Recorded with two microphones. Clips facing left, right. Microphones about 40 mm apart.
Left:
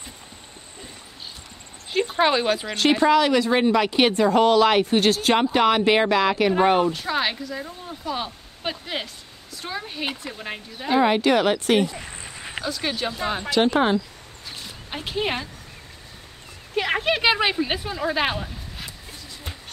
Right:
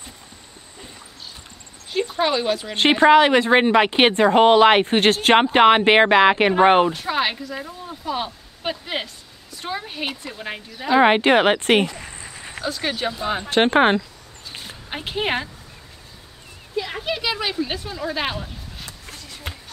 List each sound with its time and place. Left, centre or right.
2.0 s speech: centre
2.7 s speech: right
6.9 s speech: centre
11.0 s speech: right
12.6 s speech: centre
13.5 s speech: right
14.9 s a woman's voice: right
16.7 s speech: left
17.2 s speech: left; by 18.9 s centre